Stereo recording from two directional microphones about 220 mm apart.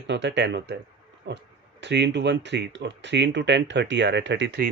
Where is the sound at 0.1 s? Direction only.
50° right (ahead or behind).